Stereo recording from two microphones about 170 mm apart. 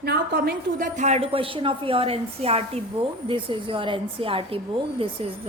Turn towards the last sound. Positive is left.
turn(degrees=-35)  # may be behind; listen again after turning